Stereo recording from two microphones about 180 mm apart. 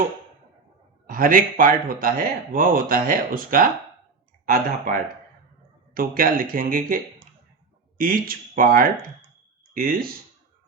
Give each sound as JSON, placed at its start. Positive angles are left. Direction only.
{"t": 1.0, "sound": "speech", "side_deg": -50}